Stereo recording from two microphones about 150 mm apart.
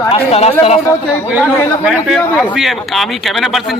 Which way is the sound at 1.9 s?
5° left (ahead or behind).